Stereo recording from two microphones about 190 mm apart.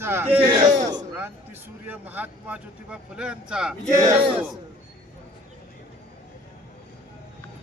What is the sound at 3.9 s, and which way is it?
Speech, 15° right (ahead or behind).